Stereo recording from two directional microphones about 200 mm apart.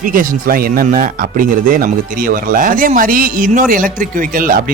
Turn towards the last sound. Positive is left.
turn(degrees=-45)  # may be behind; listen again after turning